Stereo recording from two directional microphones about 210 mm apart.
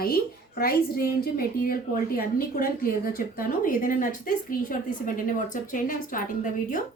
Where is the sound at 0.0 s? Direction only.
45° left (ahead or behind).